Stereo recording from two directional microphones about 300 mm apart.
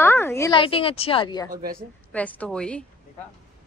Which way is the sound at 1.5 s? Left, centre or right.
Right.